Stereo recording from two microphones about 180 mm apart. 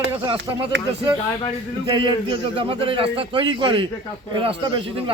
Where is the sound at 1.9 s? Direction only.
25° right (ahead or behind).